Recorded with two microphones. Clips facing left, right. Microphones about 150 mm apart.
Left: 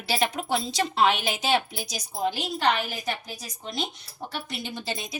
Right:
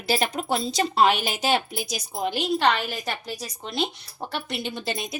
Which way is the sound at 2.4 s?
65° right (ahead or behind).